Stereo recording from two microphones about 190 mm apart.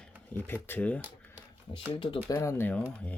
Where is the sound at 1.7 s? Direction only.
30° left (ahead or behind); by 2.8 s 10° left (ahead or behind).